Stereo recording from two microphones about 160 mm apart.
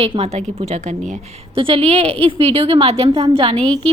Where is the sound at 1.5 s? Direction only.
35° right (ahead or behind).